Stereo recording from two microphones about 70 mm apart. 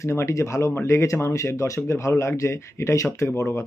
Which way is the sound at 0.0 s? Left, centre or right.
Left.